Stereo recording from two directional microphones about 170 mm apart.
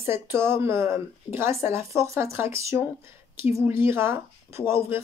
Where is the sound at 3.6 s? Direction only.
15° right (ahead or behind).